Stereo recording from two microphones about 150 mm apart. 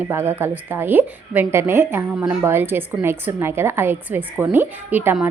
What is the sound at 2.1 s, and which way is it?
A woman's voice, 5° right (ahead or behind).